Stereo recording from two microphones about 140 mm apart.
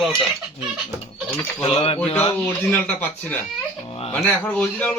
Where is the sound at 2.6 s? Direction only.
10° left (ahead or behind).